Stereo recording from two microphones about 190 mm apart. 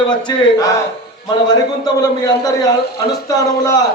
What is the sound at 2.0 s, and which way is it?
A man's voice, 20° left (ahead or behind).